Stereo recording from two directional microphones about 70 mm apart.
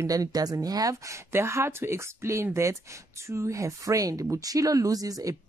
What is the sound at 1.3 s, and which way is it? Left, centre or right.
Speech, right.